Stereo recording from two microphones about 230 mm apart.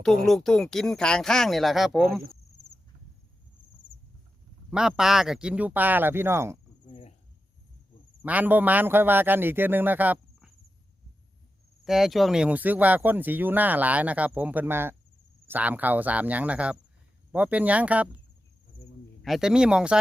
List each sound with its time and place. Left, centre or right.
0.3 s speech: centre
4.7 s speech: centre
6.8 s cricket: left
8.2 s speech: centre
11.9 s speech: centre
19.2 s speech: centre